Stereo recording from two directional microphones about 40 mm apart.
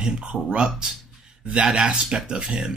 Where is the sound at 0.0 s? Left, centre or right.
Right.